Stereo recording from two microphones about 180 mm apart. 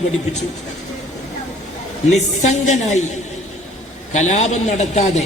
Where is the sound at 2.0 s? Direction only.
40° left (ahead or behind).